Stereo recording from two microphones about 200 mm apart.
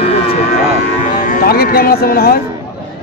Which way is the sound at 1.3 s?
50° left (ahead or behind).